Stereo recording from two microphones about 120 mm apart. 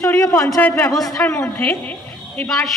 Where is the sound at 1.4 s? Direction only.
15° left (ahead or behind).